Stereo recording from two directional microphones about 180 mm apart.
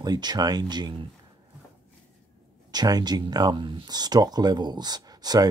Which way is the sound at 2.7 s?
20° right (ahead or behind).